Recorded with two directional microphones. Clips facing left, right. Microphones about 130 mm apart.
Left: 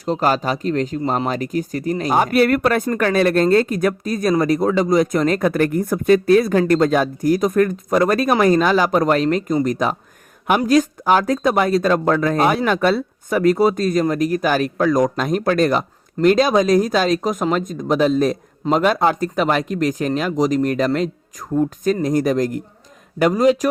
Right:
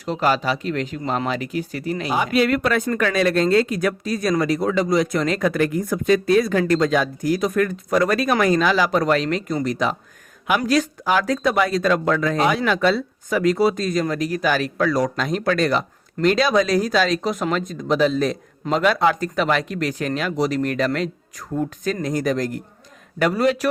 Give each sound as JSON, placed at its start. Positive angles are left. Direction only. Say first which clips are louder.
{"t": 0.0, "sound": "speech", "louder": "left 2 dB", "side_deg": 40}
{"t": 2.8, "sound": "speech", "louder": "left 3 dB", "side_deg": 40}
{"t": 6.1, "sound": "speech", "louder": "left 4 dB", "side_deg": 35}
{"t": 6.7, "sound": "speech", "louder": "left 3 dB", "side_deg": 50}